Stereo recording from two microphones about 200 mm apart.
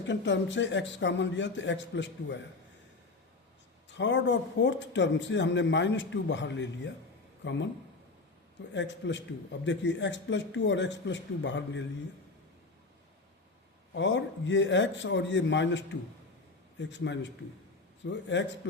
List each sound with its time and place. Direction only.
0.0 s a man's voice: 65° left (ahead or behind)
3.8 s a man's voice: 65° left (ahead or behind)
8.7 s a man's voice: 65° left (ahead or behind)
13.9 s a man's voice: 65° left (ahead or behind)